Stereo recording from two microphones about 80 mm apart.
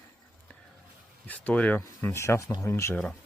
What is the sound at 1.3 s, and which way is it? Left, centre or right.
Speech, centre.